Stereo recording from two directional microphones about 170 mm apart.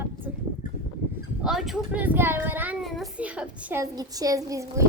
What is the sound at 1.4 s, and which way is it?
A child's voice, centre (ahead or behind).